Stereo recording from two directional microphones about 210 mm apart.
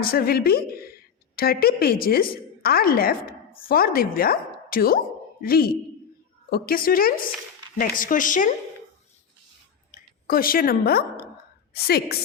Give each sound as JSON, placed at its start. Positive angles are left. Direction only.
{"t": 0.0, "sound": "a woman's voice", "side_deg": 45}
{"t": 9.9, "sound": "a woman's voice", "side_deg": 45}